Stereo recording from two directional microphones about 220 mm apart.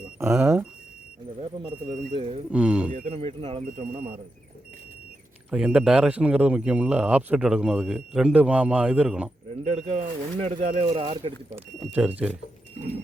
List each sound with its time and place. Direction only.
0.2 s speech: 10° right (ahead or behind)
1.4 s speech: 20° right (ahead or behind)
2.5 s speech: 5° right (ahead or behind)
3.1 s speech: 25° right (ahead or behind)
5.5 s speech: 5° right (ahead or behind)
9.6 s speech: 30° right (ahead or behind)
11.9 s speech: 5° right (ahead or behind)
12.8 s a sound: 30° right (ahead or behind)